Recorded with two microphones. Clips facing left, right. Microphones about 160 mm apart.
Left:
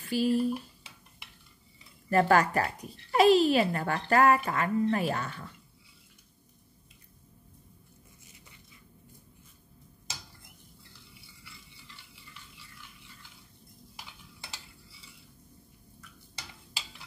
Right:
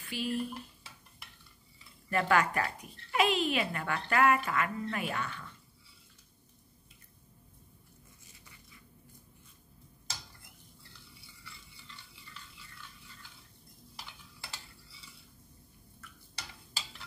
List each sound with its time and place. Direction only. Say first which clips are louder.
0.0 s dishes: left 8 dB; 40° left (ahead or behind)
2.0 s speech: left 5 dB; 40° left (ahead or behind)